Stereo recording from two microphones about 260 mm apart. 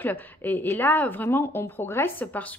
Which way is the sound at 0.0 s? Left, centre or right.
Centre.